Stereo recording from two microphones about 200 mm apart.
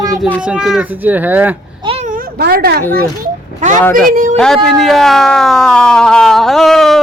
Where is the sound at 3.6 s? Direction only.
40° right (ahead or behind).